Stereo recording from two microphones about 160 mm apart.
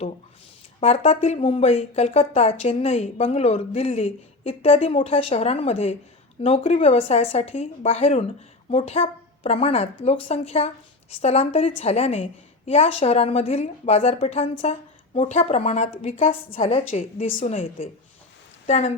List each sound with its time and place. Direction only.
0.8 s a woman's voice: 40° left (ahead or behind)